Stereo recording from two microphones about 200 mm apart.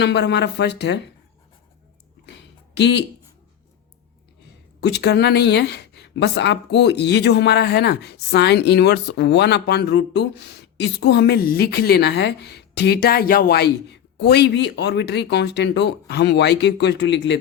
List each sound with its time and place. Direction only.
0.0 s speech: 60° left (ahead or behind)
2.2 s a sound: 60° left (ahead or behind)
4.8 s speech: 55° left (ahead or behind)